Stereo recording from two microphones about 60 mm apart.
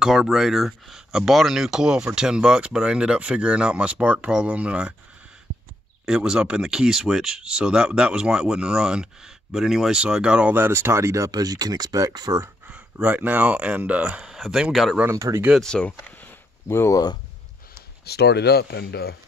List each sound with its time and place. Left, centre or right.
0.0 s speech: centre
6.0 s speech: centre
10.5 s speech: right
13.0 s speech: right
14.2 s speech: centre
15.1 s speech: right
15.6 s speech: centre
16.6 s speech: left